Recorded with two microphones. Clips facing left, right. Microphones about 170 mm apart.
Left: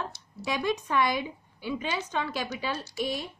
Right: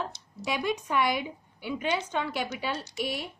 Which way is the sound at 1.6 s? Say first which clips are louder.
Right 2 dB; 20° right (ahead or behind).